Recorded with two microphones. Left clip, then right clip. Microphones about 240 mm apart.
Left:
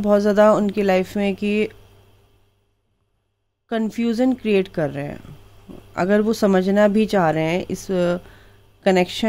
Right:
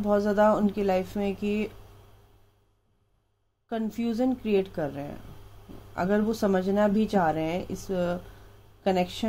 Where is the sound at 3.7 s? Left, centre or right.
Left.